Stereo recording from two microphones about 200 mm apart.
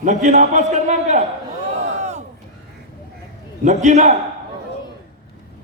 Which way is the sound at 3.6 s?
35° right (ahead or behind).